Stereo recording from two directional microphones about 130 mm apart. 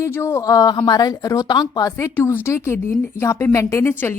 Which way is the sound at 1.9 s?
20° left (ahead or behind).